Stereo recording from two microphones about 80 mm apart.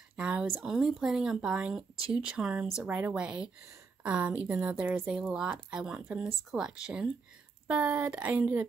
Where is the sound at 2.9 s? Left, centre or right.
Centre.